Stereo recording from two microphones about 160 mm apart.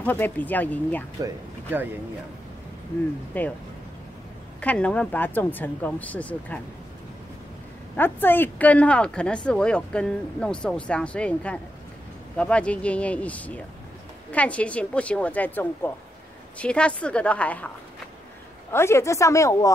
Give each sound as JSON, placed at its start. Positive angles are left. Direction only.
{"t": 0.0, "sound": "a woman's voice", "side_deg": 10}
{"t": 1.2, "sound": "speech", "side_deg": -10}
{"t": 3.3, "sound": "a woman's voice", "side_deg": 10}
{"t": 4.6, "sound": "a woman's voice", "side_deg": 10}
{"t": 7.9, "sound": "a woman's voice", "side_deg": 10}
{"t": 18.7, "sound": "a woman's voice", "side_deg": 15}